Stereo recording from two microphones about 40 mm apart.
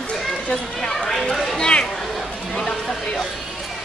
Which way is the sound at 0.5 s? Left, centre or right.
Left.